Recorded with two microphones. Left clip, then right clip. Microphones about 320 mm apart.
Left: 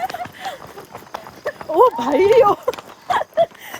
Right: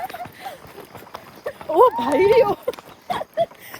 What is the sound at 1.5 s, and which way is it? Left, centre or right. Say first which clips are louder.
Speech: left 1 dB; centre.